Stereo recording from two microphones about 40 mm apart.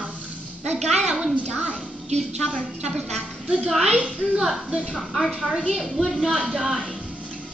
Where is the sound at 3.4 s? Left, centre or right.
Centre.